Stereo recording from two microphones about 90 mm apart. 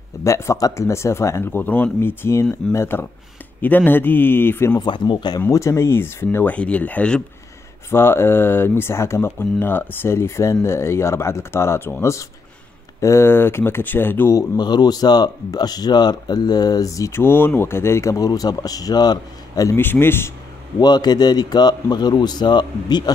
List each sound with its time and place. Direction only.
0.2 s speech: 35° left (ahead or behind)
4.8 s speech: 60° left (ahead or behind)
5.5 s speech: 35° left (ahead or behind); by 7.2 s 10° left (ahead or behind)
7.9 s speech: 25° left (ahead or behind)
14.6 s speech: 50° left (ahead or behind)
19.8 s speech: 25° left (ahead or behind)
20.8 s speech: 50° left (ahead or behind)